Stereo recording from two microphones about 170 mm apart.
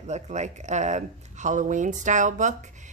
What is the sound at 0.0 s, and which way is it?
A woman's voice, 45° right (ahead or behind).